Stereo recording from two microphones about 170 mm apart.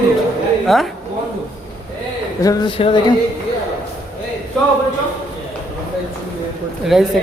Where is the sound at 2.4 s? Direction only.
20° left (ahead or behind).